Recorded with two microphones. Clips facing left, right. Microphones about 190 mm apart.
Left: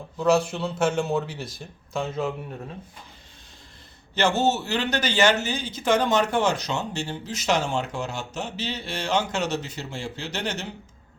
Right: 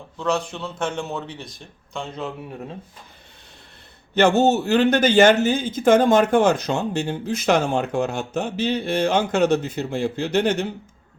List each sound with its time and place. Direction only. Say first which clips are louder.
0.2 s speech: left 3 dB; 5° left (ahead or behind)
4.1 s speech: right 6 dB; 55° right (ahead or behind)